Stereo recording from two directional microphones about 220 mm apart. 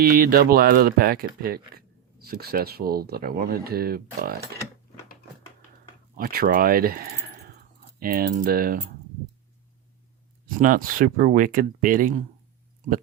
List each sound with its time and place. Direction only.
0.0 s speech: 40° right (ahead or behind)
6.1 s speech: 40° right (ahead or behind)
10.4 s speech: 40° right (ahead or behind)